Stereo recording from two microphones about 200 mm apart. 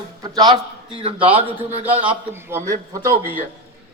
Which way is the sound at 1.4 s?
30° right (ahead or behind).